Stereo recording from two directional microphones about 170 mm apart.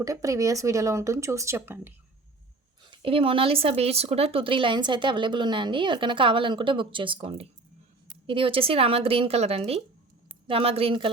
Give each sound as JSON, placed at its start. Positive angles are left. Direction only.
{"t": 0.0, "sound": "speech", "side_deg": -20}
{"t": 2.9, "sound": "speech", "side_deg": -30}